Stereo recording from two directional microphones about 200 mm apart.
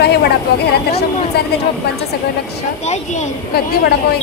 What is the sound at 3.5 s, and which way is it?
Speech, 50° left (ahead or behind).